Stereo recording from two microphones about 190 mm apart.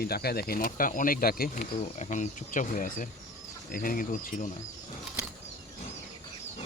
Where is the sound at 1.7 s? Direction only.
35° left (ahead or behind).